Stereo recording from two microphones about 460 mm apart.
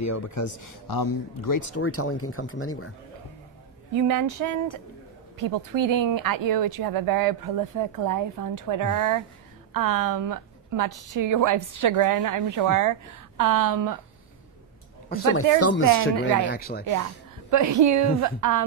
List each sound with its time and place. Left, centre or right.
0.0 s speech: left
3.9 s a woman's voice: right
15.6 s speech: left
17.5 s a woman's voice: right